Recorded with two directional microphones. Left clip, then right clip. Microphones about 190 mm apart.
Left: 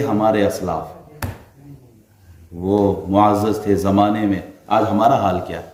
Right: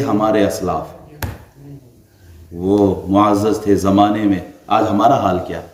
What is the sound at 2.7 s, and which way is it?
A man's voice, 10° left (ahead or behind).